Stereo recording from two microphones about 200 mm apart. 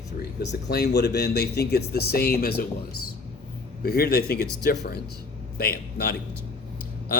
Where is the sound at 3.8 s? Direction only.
50° left (ahead or behind).